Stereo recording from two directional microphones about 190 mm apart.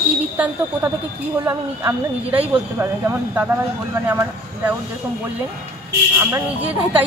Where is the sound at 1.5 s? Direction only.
15° right (ahead or behind).